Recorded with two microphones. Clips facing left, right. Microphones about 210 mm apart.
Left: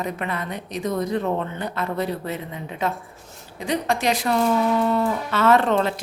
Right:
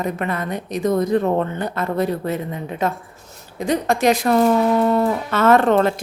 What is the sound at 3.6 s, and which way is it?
Speech, 45° right (ahead or behind).